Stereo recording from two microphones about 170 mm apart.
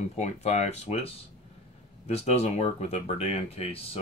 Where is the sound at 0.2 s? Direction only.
40° left (ahead or behind).